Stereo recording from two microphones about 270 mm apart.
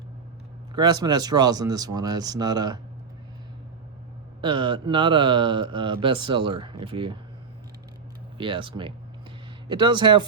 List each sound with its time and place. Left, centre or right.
0.8 s speech: centre
4.4 s speech: centre
8.4 s speech: centre